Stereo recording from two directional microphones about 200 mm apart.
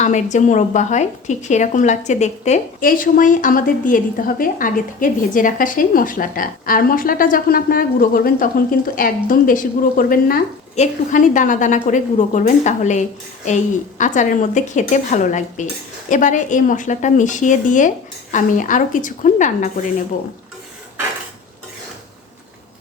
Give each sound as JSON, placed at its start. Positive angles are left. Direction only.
{"t": 0.0, "sound": "a woman's voice", "side_deg": 35}